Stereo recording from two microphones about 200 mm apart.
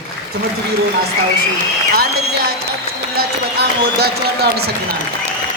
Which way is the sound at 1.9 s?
50° right (ahead or behind).